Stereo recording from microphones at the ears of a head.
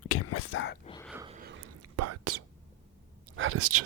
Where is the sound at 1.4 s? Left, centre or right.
Right.